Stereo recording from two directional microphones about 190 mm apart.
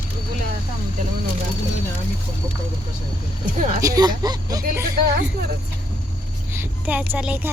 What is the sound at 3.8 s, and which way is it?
Speech, 20° right (ahead or behind).